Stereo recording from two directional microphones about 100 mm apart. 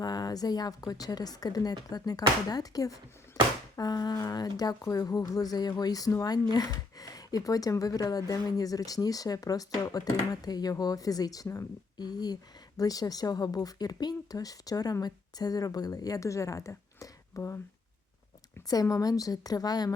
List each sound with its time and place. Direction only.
0.0 s speech: 40° left (ahead or behind)
18.7 s speech: 35° left (ahead or behind)